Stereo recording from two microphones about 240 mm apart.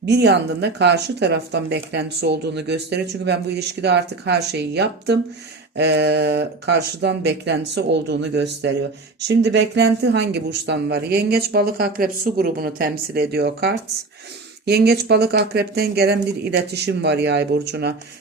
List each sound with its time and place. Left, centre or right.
0.0 s speech: right